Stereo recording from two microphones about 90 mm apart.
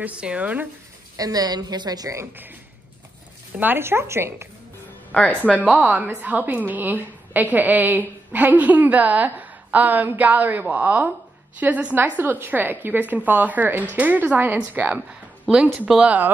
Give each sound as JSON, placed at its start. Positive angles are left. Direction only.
{"t": 0.0, "sound": "speech", "side_deg": -15}
{"t": 1.1, "sound": "a woman's voice", "side_deg": -45}
{"t": 3.5, "sound": "a woman's voice", "side_deg": -20}
{"t": 5.1, "sound": "speech", "side_deg": 15}
{"t": 5.7, "sound": "a woman's voice", "side_deg": -15}